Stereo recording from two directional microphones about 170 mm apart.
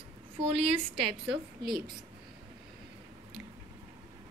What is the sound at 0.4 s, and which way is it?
Speech, 35° right (ahead or behind).